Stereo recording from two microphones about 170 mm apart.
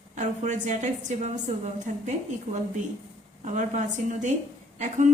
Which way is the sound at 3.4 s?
45° right (ahead or behind).